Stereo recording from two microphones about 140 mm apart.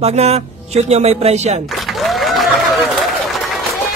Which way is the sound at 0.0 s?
50° right (ahead or behind).